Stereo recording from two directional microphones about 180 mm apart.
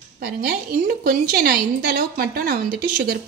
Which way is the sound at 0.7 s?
55° right (ahead or behind).